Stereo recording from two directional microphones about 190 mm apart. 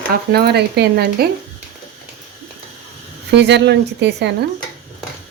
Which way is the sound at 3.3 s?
65° right (ahead or behind).